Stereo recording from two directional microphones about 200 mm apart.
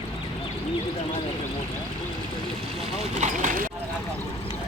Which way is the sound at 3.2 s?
40° right (ahead or behind).